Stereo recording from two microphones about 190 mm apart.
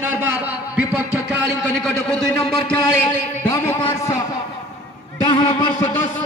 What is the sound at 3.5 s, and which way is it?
Speech, 25° left (ahead or behind).